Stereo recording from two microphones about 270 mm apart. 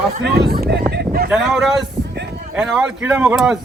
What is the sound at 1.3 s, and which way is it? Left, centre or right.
Speech, centre.